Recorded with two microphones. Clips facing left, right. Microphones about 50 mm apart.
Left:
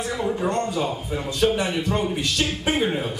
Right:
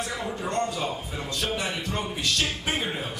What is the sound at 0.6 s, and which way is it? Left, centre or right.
A man's voice, centre.